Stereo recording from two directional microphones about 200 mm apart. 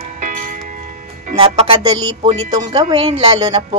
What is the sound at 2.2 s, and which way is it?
Speech, 25° right (ahead or behind).